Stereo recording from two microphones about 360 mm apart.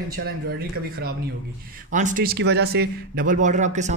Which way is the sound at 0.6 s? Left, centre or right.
Right.